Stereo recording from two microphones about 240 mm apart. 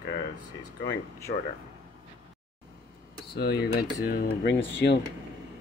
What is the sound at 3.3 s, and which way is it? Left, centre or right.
Speech, left.